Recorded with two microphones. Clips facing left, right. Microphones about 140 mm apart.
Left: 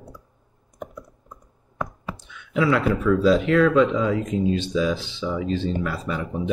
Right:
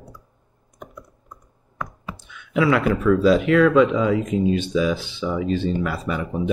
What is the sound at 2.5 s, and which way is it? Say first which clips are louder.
Speech: right 2 dB; 75° right (ahead or behind).